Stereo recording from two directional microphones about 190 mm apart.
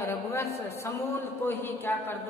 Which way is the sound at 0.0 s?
15° left (ahead or behind).